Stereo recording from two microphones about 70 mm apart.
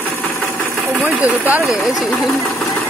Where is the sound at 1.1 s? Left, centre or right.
Right.